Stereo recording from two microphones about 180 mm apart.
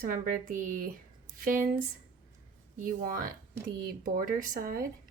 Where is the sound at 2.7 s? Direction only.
50° right (ahead or behind).